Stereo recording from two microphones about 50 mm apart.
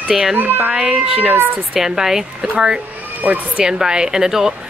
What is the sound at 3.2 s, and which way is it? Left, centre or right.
Speech, right.